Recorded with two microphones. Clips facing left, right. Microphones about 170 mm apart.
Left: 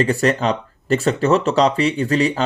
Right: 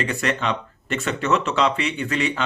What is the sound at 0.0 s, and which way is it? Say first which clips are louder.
Speech: left 7 dB; 35° left (ahead or behind).